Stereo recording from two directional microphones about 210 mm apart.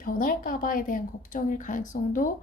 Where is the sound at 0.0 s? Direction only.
40° left (ahead or behind).